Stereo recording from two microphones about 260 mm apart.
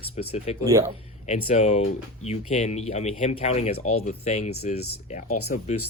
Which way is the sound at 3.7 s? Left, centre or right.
Left.